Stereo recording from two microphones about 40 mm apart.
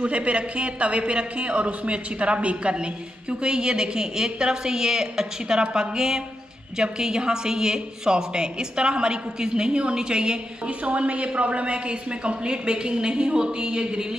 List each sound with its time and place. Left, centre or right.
0.0 s speech: right
10.9 s speech: right